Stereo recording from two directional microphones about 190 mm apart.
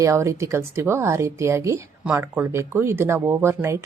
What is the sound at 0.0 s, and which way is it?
Speech, 15° right (ahead or behind).